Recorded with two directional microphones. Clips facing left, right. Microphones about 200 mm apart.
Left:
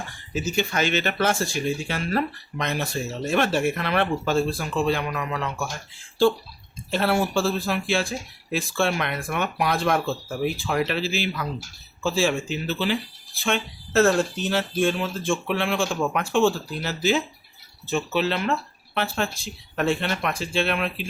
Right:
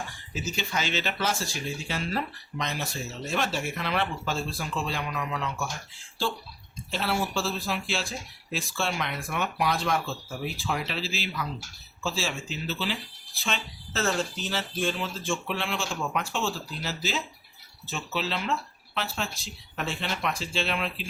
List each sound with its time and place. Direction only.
0.3 s speech: 55° left (ahead or behind)
6.9 s speech: 55° left (ahead or behind)